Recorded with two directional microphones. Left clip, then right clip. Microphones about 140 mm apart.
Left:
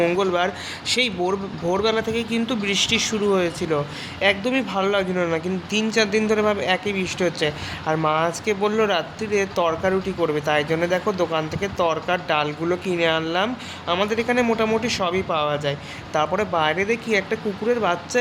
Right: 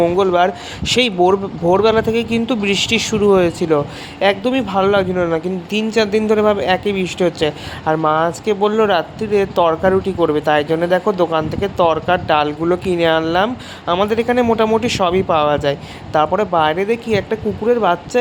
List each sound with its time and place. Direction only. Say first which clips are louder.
0.2 s speech: right 7 dB; 35° right (ahead or behind)
5.1 s speech: right 5 dB; 25° right (ahead or behind)
5.7 s speech: right 4 dB; 40° right (ahead or behind)